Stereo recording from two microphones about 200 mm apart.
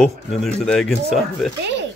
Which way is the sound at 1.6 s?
60° right (ahead or behind).